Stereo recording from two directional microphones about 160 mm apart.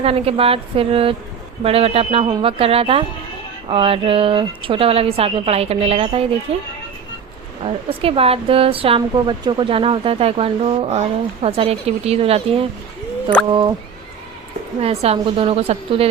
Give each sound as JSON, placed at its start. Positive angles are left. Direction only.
{"t": 0.0, "sound": "speech", "side_deg": -35}
{"t": 14.8, "sound": "speech", "side_deg": -40}